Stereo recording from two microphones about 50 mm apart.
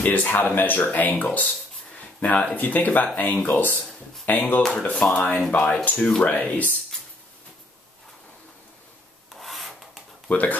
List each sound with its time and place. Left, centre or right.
0.0 s speech: left
4.8 s speech: left
6.2 s speech: left
9.3 s rub: centre
10.3 s speech: left